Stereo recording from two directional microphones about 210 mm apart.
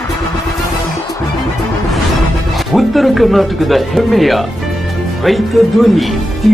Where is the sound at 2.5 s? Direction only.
Centre (ahead or behind).